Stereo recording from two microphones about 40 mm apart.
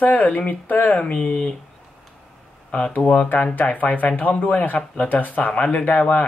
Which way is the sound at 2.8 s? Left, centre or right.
Left.